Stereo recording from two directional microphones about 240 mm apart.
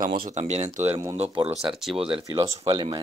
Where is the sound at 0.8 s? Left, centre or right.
Centre.